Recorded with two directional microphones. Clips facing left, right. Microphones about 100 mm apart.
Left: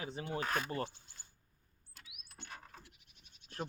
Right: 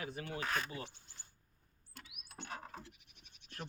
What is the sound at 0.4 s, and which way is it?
Insect, 5° left (ahead or behind).